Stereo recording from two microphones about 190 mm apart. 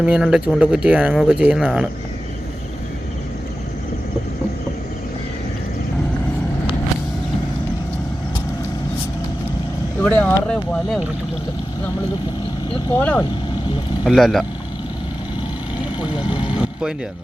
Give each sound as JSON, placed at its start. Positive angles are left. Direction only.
{"t": 0.0, "sound": "speech", "side_deg": -5}
{"t": 10.0, "sound": "speech", "side_deg": 10}
{"t": 13.0, "sound": "speech", "side_deg": 10}
{"t": 14.0, "sound": "speech", "side_deg": 0}
{"t": 16.0, "sound": "vehicle", "side_deg": 25}